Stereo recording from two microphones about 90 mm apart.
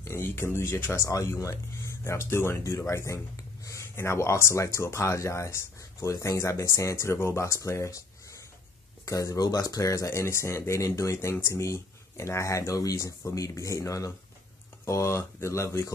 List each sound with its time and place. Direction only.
0.0 s speech: 30° left (ahead or behind)